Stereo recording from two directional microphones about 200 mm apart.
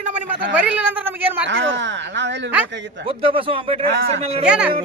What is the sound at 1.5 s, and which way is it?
Speech, 65° right (ahead or behind).